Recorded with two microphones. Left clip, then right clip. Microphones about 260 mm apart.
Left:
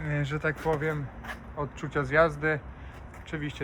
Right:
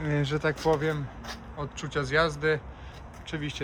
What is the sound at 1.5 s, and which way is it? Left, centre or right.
Speech, centre.